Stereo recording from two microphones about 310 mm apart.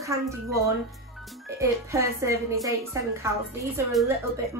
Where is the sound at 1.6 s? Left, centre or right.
Centre.